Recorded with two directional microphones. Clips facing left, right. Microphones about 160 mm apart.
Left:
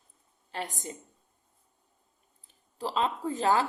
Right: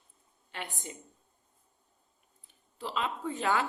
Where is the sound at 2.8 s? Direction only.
35° left (ahead or behind).